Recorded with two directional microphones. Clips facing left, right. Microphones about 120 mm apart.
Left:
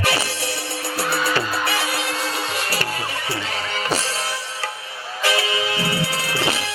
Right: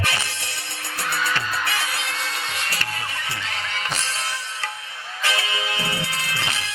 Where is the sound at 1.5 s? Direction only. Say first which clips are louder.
Left 3 dB; 10° left (ahead or behind).